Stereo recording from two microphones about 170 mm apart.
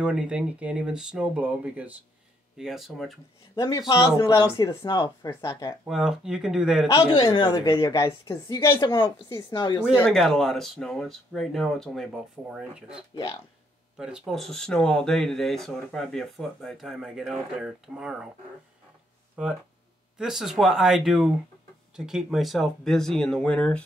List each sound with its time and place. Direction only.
0.0 s speech: 5° right (ahead or behind)
3.5 s speech: 25° left (ahead or behind)
5.9 s speech: 5° right (ahead or behind)
6.9 s speech: 30° left (ahead or behind)
9.9 s speech: 5° left (ahead or behind)
13.1 s speech: 30° left (ahead or behind)
13.9 s speech: 5° right (ahead or behind)
19.4 s speech: 5° right (ahead or behind)